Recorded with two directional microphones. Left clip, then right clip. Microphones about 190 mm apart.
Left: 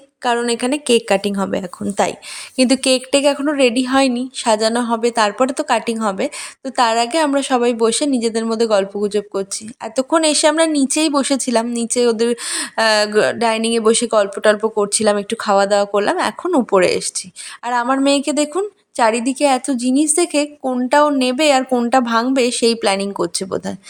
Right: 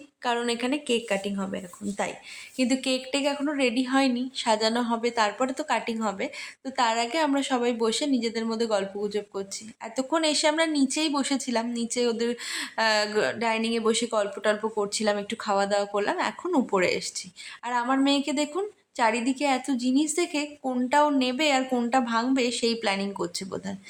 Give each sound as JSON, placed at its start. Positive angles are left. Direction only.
{"t": 0.2, "sound": "a woman's voice", "side_deg": 40}